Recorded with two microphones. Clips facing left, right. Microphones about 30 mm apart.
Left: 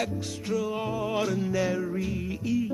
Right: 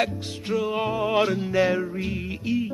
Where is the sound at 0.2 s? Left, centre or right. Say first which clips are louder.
Right 3 dB; right.